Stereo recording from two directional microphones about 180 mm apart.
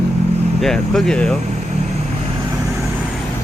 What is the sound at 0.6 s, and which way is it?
Speech, centre (ahead or behind).